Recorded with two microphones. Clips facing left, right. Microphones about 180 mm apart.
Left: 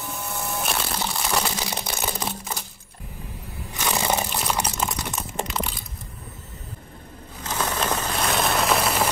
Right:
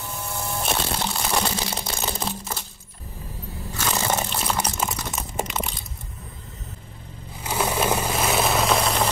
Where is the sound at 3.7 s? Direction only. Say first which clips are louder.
Left 1 dB; 15° left (ahead or behind).